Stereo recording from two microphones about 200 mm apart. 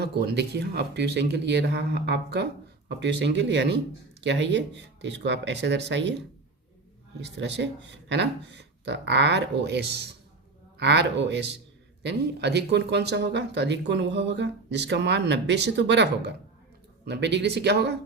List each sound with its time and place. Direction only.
0.0 s speech: 55° right (ahead or behind)
7.2 s speech: 60° right (ahead or behind)